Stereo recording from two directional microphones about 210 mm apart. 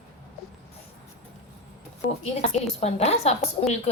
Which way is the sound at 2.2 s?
30° left (ahead or behind).